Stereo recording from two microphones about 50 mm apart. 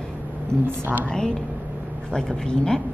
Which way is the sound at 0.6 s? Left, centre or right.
Right.